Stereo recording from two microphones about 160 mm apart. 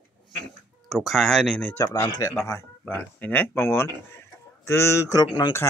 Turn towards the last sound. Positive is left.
turn(degrees=25)  # may be behind; listen again after turning